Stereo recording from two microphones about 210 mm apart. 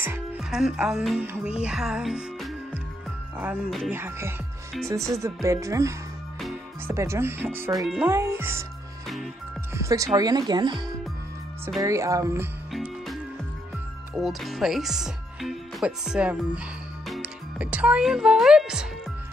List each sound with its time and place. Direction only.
0.0 s speech: 10° right (ahead or behind)
1.6 s music: 5° right (ahead or behind)
3.3 s speech: 5° right (ahead or behind)
9.0 s music: centre (ahead or behind)
9.8 s speech: 15° right (ahead or behind)
11.8 s speech: 15° right (ahead or behind)
12.7 s music: centre (ahead or behind)
14.1 s speech: centre (ahead or behind)